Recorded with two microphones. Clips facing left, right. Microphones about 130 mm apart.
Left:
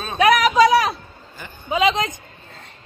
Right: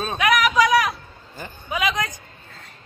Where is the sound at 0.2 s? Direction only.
30° left (ahead or behind).